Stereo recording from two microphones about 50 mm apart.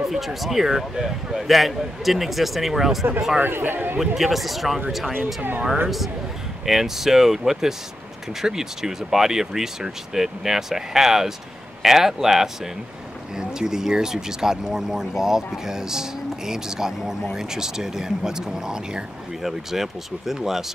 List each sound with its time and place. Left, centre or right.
0.0 s speech: centre
3.3 s a man's voice: right
4.0 s speech: centre
5.1 s a man's voice: right
5.9 s speech: centre